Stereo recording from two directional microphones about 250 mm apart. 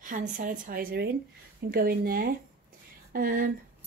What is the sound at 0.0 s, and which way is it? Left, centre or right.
A woman's voice, right.